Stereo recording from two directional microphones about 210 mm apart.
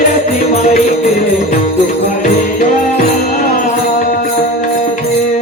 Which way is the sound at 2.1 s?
35° left (ahead or behind).